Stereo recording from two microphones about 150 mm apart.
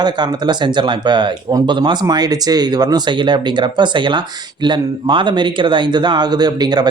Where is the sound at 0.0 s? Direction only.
30° right (ahead or behind).